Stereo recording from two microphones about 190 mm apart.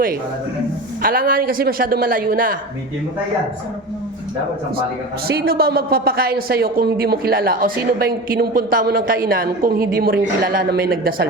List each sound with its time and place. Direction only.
1.0 s a woman's voice: 50° right (ahead or behind)
5.3 s a woman's voice: 55° right (ahead or behind)